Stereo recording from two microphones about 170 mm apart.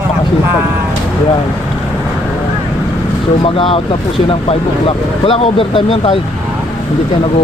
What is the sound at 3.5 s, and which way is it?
Speech, 35° left (ahead or behind).